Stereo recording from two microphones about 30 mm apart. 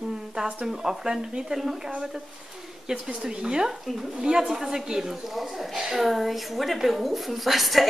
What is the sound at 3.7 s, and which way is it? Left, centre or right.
Speech, centre.